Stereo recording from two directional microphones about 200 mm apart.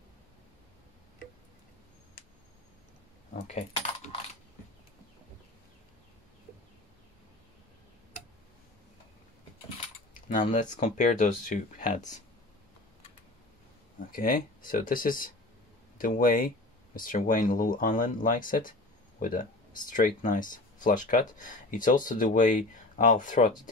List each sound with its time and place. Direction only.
3.4 s coin: 30° left (ahead or behind)
10.1 s speech: 40° left (ahead or behind)
13.9 s speech: 45° left (ahead or behind)